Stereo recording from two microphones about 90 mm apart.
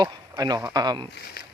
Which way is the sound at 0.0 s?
45° right (ahead or behind).